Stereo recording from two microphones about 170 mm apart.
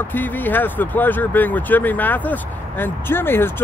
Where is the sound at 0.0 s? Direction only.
10° left (ahead or behind).